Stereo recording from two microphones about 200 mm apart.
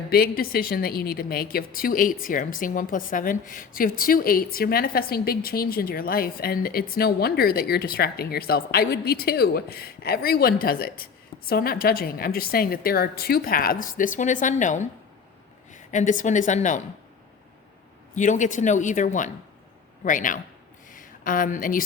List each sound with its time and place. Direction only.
0.1 s a woman's voice: 50° left (ahead or behind)
18.1 s a man's voice: 40° left (ahead or behind)